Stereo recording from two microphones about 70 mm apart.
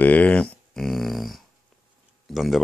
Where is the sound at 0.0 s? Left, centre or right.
Left.